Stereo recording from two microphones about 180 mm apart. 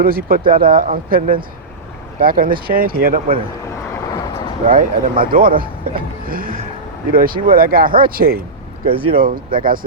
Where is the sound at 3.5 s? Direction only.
15° left (ahead or behind).